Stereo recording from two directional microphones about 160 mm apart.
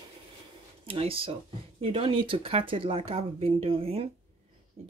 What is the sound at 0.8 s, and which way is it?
Speech, 35° right (ahead or behind).